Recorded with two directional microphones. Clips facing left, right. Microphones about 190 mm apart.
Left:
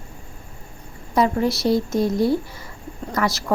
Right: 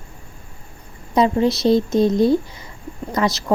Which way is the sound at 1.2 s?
20° right (ahead or behind).